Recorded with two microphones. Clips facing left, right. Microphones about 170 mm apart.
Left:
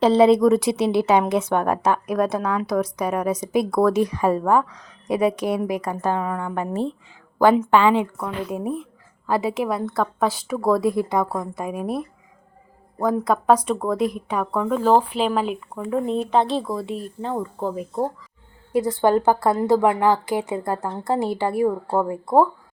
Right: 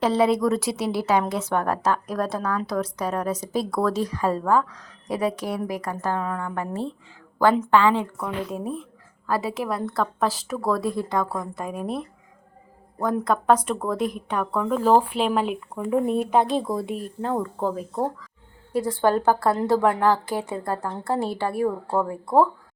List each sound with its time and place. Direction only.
0.0 s a woman's voice: 25° left (ahead or behind)
8.2 s speech: 5° left (ahead or behind)
9.2 s a woman's voice: 20° left (ahead or behind); by 16.8 s 20° right (ahead or behind)
18.7 s a woman's voice: 15° left (ahead or behind)